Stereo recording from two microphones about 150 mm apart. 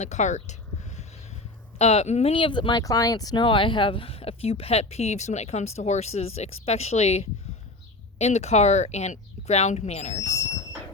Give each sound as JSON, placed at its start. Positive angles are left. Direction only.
{"t": 0.0, "sound": "speech", "side_deg": 50}
{"t": 1.8, "sound": "speech", "side_deg": 50}